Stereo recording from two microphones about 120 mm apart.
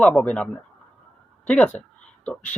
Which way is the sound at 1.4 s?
10° left (ahead or behind).